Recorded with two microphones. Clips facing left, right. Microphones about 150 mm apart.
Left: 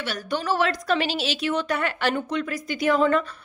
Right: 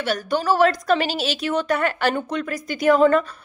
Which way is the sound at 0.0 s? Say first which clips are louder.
Right 5 dB; 45° right (ahead or behind).